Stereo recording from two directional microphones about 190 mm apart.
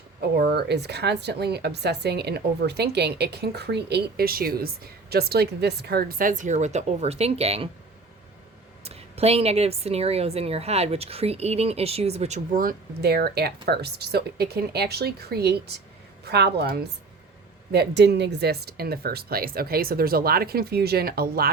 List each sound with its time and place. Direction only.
0.2 s speech: 60° right (ahead or behind); by 7.7 s 30° right (ahead or behind)
8.8 s a woman's voice: 30° right (ahead or behind)
12.5 s speech: 50° right (ahead or behind)